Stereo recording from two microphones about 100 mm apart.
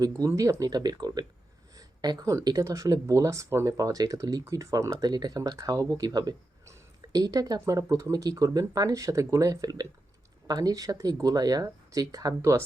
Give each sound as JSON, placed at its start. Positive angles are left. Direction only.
{"t": 0.0, "sound": "speech", "side_deg": -35}
{"t": 6.7, "sound": "a sound", "side_deg": -35}
{"t": 7.6, "sound": "speech", "side_deg": -35}